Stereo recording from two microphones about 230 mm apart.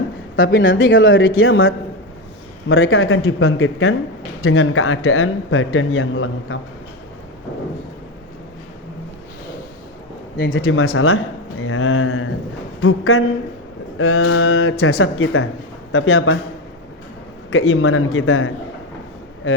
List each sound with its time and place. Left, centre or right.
0.3 s speech: left
10.3 s speech: left
11.6 s a sound: left
14.0 s speech: left
17.5 s speech: left